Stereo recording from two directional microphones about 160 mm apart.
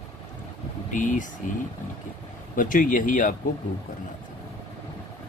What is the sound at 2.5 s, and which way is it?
Speech, 55° left (ahead or behind).